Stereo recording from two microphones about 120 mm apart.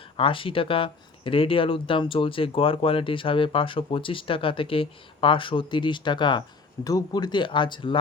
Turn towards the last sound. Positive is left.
turn(degrees=40)  # may be behind; listen again after turning